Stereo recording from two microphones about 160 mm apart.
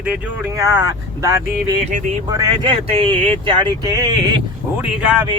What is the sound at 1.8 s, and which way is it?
Speech, 50° right (ahead or behind).